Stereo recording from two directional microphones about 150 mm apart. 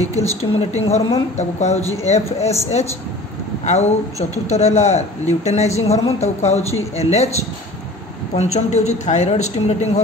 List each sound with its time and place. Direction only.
0.2 s speech: 45° left (ahead or behind)
8.4 s speech: 45° left (ahead or behind)